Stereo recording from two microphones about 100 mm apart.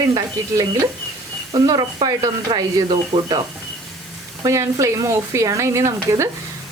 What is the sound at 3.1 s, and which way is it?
Speech, 50° right (ahead or behind).